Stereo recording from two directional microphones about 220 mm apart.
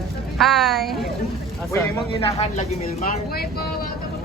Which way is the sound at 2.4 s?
35° left (ahead or behind).